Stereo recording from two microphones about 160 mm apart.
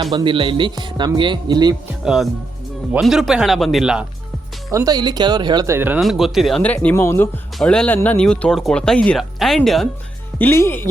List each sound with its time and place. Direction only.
0.0 s speech: 25° right (ahead or behind)
2.9 s speech: centre (ahead or behind)
4.7 s speech: 20° right (ahead or behind)
6.0 s speech: centre (ahead or behind); by 7.3 s 15° left (ahead or behind)
7.6 s speech: 5° left (ahead or behind)
10.3 s speech: 15° left (ahead or behind)